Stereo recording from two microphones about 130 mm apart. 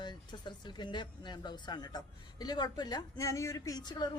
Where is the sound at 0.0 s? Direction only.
35° left (ahead or behind).